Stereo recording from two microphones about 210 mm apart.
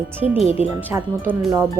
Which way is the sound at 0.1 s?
10° right (ahead or behind).